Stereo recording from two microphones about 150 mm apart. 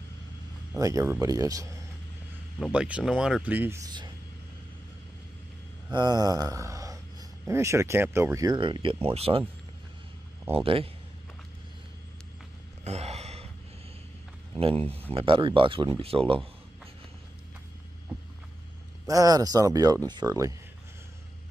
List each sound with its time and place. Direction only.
0.7 s speech: 20° right (ahead or behind)
2.7 s speech: 5° right (ahead or behind)
3.8 s speech: 30° right (ahead or behind)
5.9 s speech: 25° right (ahead or behind)
10.5 s speech: 40° right (ahead or behind)
12.8 s gasp: 45° right (ahead or behind)
14.9 s speech: 40° right (ahead or behind)
19.0 s speech: 25° right (ahead or behind)